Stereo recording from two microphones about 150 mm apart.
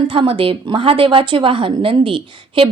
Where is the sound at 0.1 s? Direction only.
35° right (ahead or behind).